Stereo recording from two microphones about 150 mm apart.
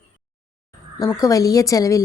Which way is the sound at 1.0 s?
25° left (ahead or behind).